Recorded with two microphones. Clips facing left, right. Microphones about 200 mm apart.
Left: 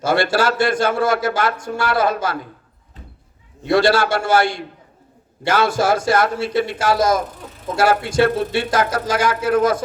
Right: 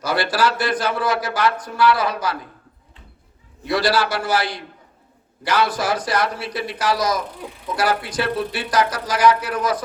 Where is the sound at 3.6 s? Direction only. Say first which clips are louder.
Left 4 dB; 25° left (ahead or behind).